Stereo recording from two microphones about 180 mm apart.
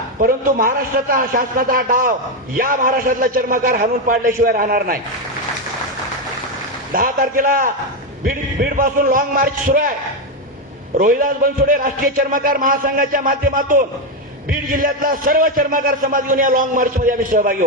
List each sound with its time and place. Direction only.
0.2 s a man's voice: 50° right (ahead or behind)
6.9 s a man's voice: 50° right (ahead or behind)
10.9 s a man's voice: 50° right (ahead or behind)